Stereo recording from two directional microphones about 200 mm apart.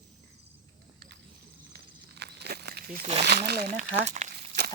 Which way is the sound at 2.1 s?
55° right (ahead or behind).